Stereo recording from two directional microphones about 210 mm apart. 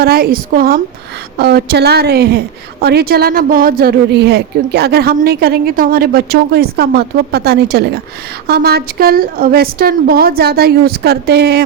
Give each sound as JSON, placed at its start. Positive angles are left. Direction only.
{"t": 0.0, "sound": "a woman's voice", "side_deg": -45}